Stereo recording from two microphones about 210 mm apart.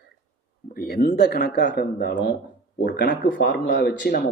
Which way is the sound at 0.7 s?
45° left (ahead or behind).